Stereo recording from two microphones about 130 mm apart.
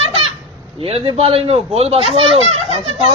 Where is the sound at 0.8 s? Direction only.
45° right (ahead or behind).